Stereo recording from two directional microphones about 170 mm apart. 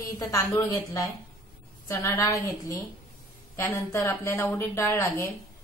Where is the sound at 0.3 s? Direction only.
20° left (ahead or behind).